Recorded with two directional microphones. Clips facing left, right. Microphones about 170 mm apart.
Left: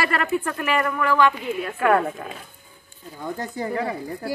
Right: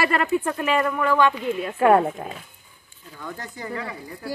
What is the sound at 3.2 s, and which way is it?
Speech, 30° left (ahead or behind).